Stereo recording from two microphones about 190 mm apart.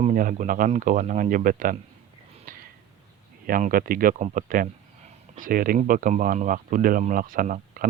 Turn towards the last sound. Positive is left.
turn(degrees=-45)  # may be behind; listen again after turning